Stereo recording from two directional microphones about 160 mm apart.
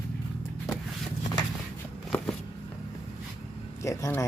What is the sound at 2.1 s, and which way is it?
Shuffling cards, 5° left (ahead or behind).